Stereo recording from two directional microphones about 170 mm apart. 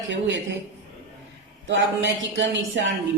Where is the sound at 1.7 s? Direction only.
90° right.